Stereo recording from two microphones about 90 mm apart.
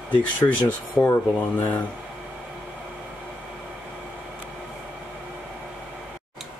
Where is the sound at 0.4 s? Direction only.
40° left (ahead or behind).